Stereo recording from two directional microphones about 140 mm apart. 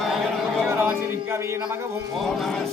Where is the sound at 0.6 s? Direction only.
15° right (ahead or behind).